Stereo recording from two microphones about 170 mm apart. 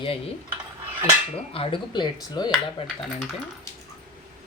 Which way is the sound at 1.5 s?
30° left (ahead or behind).